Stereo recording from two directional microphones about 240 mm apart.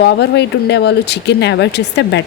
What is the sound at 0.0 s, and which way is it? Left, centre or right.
Speech, left.